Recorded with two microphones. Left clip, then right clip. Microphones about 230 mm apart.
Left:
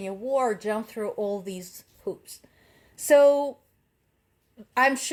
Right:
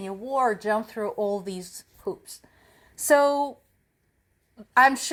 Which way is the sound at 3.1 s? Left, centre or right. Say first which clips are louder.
Left 2 dB; right.